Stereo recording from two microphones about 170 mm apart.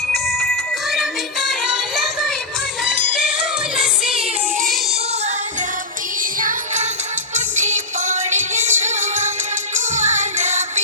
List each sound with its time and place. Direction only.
0.1 s music: centre (ahead or behind)
2.8 s music: 5° right (ahead or behind)
7.3 s music: 45° right (ahead or behind)